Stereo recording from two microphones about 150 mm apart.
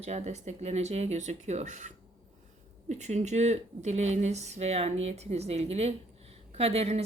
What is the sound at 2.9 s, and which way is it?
A woman's voice, 50° right (ahead or behind).